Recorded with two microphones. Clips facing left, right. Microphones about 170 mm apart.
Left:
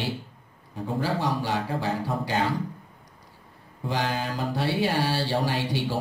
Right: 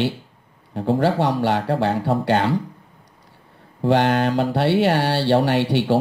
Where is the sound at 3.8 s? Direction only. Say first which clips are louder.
Right 11 dB; 70° right (ahead or behind).